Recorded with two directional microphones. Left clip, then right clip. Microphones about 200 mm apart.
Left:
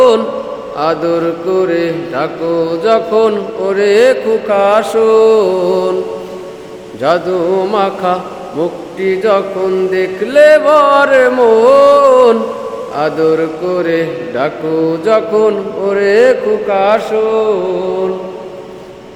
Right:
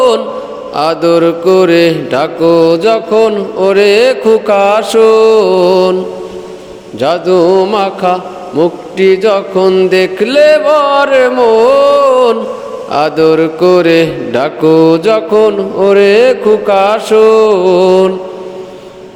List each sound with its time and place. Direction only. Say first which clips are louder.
0.8 s mantra: right 5 dB; 50° right (ahead or behind)
7.0 s mantra: right 4 dB; 40° right (ahead or behind)